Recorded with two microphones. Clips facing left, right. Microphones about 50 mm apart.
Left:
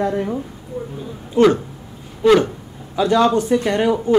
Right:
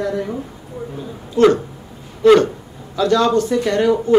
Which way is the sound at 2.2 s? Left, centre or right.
Centre.